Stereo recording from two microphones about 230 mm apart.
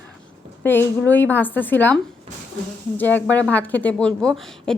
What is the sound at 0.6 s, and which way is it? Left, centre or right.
A woman's voice, centre.